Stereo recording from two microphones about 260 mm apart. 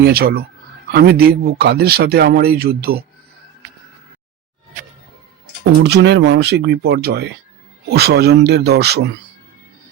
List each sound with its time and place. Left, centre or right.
0.0 s speech: right
5.8 s speech: right